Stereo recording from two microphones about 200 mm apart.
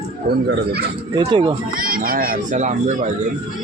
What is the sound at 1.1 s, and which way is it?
Speech, 25° right (ahead or behind).